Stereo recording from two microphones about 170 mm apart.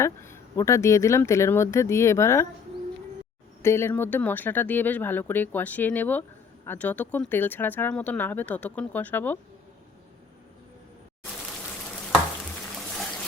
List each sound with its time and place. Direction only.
0.0 s speech: 15° left (ahead or behind)
3.6 s speech: 15° left (ahead or behind)